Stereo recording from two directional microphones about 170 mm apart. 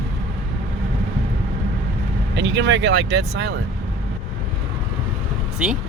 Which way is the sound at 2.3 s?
90° right.